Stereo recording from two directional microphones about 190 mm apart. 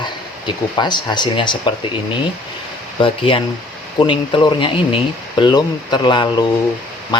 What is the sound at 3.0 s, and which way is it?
Speech, 30° left (ahead or behind).